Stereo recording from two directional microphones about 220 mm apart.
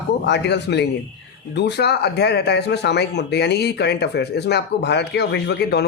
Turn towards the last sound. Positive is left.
turn(degrees=50)  # may be behind; listen again after turning